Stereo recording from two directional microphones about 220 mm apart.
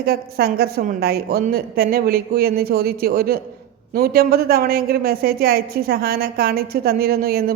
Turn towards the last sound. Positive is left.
turn(degrees=-45)  # may be behind; listen again after turning